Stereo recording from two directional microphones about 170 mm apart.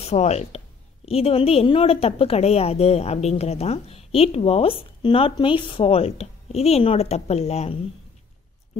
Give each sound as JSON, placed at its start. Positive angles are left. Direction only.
{"t": 0.0, "sound": "a woman's voice", "side_deg": 40}